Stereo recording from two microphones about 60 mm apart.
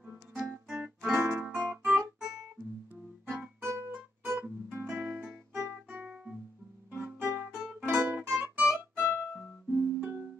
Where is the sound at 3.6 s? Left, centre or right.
Right.